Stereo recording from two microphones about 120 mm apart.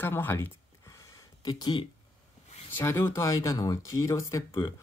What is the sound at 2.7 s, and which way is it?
Speech, 20° left (ahead or behind).